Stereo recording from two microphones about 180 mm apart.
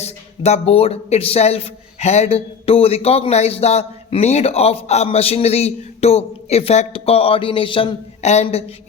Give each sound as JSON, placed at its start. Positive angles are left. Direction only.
{"t": 0.0, "sound": "speech", "side_deg": 35}